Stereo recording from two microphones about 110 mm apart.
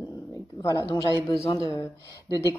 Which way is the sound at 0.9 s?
30° left (ahead or behind).